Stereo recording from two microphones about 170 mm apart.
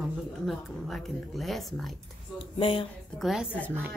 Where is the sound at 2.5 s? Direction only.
30° left (ahead or behind).